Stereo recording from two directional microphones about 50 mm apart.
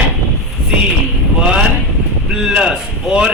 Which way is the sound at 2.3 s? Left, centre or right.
Centre.